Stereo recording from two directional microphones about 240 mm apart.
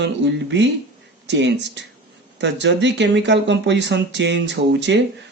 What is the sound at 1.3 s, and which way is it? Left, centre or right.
Speech, right.